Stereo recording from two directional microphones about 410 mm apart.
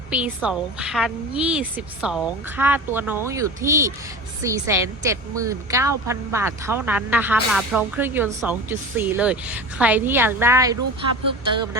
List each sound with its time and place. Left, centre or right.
0.1 s a woman's voice: centre